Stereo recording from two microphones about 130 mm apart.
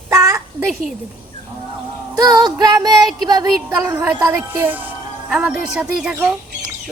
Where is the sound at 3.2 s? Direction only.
30° right (ahead or behind).